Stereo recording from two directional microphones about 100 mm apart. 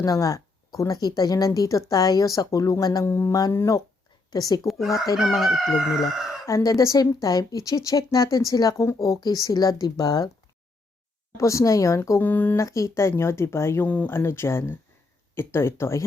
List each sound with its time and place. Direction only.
0.0 s speech: 35° left (ahead or behind)
4.3 s speech: 40° left (ahead or behind)
5.1 s chicken: centre (ahead or behind)
6.4 s speech: 35° left (ahead or behind)
11.3 s speech: 30° left (ahead or behind)
12.5 s speech: 30° left (ahead or behind)